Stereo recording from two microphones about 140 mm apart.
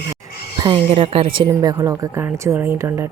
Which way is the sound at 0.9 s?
40° right (ahead or behind).